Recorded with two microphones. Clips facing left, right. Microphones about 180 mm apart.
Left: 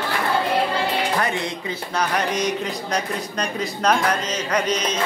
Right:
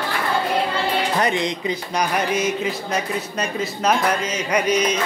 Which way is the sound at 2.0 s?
10° right (ahead or behind).